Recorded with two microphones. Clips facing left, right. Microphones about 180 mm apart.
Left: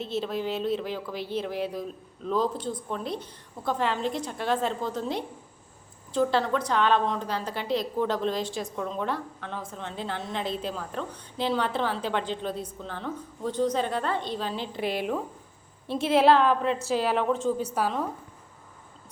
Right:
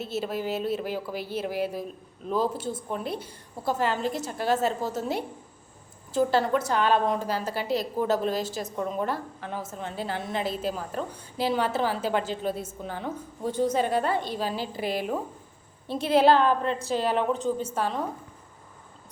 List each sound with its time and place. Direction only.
0.0 s a woman's voice: 5° right (ahead or behind)